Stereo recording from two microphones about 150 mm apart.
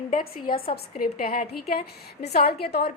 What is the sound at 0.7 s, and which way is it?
Speech, 75° left (ahead or behind).